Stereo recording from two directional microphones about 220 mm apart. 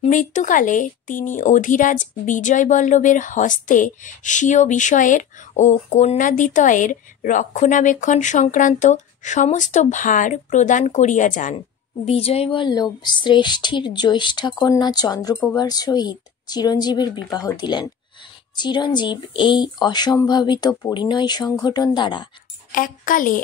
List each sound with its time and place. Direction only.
0.0 s speech: 35° left (ahead or behind)
22.7 s a woman's voice: 40° left (ahead or behind)